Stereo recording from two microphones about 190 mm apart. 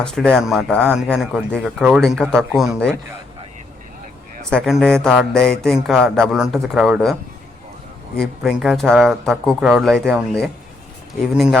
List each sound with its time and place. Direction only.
0.0 s speech: 5° left (ahead or behind)
4.4 s speech: centre (ahead or behind)
8.2 s speech: centre (ahead or behind)